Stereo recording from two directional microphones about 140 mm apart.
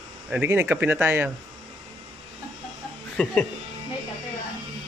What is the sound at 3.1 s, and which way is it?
Speech, 5° left (ahead or behind).